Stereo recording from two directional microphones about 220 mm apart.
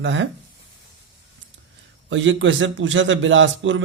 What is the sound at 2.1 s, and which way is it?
Speech, 60° right (ahead or behind).